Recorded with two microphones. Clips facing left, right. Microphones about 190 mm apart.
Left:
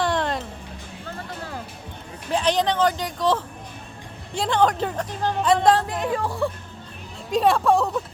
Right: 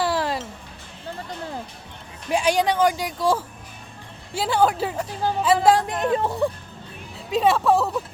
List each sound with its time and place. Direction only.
0.0 s music: 5° right (ahead or behind)
2.3 s a woman's voice: 10° right (ahead or behind)
5.9 s speech: 20° right (ahead or behind)
7.3 s speech: centre (ahead or behind)